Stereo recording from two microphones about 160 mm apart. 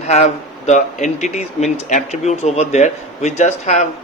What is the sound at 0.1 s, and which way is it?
Speech, 45° left (ahead or behind).